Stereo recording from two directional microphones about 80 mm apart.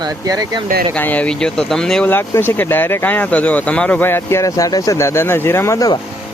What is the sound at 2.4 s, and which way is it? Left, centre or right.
Speech, left.